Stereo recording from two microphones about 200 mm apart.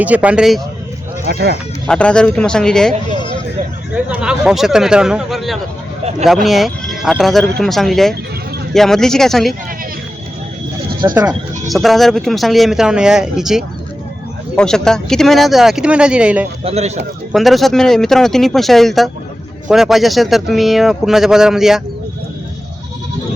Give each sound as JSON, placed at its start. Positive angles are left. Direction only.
{"t": 0.0, "sound": "speech", "side_deg": -5}
{"t": 1.3, "sound": "speech", "side_deg": -50}
{"t": 1.9, "sound": "speech", "side_deg": 5}
{"t": 3.9, "sound": "speech", "side_deg": -5}
{"t": 11.0, "sound": "speech", "side_deg": -20}
{"t": 11.7, "sound": "speech", "side_deg": 0}
{"t": 16.6, "sound": "speech", "side_deg": -35}
{"t": 17.3, "sound": "speech", "side_deg": 0}